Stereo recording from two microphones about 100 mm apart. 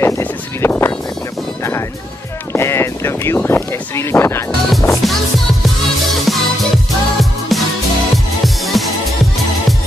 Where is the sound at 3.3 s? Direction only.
25° left (ahead or behind).